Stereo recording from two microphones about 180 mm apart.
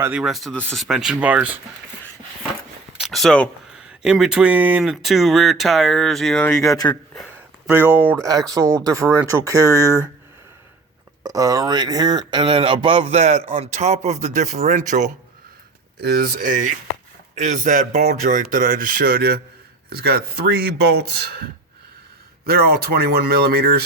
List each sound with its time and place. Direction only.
0.0 s speech: 5° right (ahead or behind)
3.0 s a sound: centre (ahead or behind)
4.0 s speech: 5° right (ahead or behind)
7.7 s speech: 10° right (ahead or behind)
11.2 s speech: 20° right (ahead or behind); by 15.1 s 45° right (ahead or behind)
16.0 s speech: 55° right (ahead or behind)
22.4 s speech: 60° right (ahead or behind)